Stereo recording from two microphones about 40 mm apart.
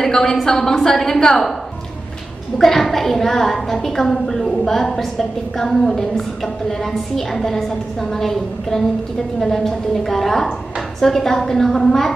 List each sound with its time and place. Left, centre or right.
0.0 s a woman's voice: centre
2.6 s a woman's voice: centre